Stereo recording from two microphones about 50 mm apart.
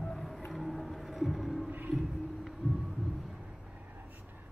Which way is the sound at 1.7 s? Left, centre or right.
Right.